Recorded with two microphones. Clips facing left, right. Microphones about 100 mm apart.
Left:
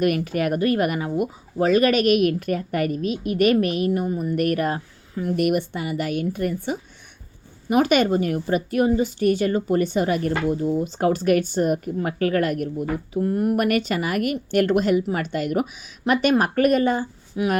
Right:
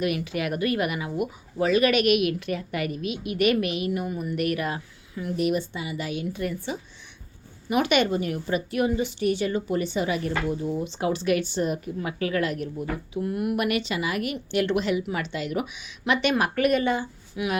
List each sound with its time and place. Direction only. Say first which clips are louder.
0.0 s speech: left 5 dB; 45° left (ahead or behind)
5.4 s speech: left 3 dB; 55° left (ahead or behind); by 17.6 s 40° left (ahead or behind)